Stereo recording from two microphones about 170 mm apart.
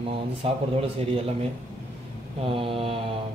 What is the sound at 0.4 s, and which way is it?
A man's voice, 35° right (ahead or behind).